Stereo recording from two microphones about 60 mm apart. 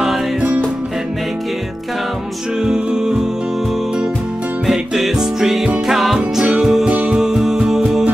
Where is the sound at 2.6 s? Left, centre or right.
Centre.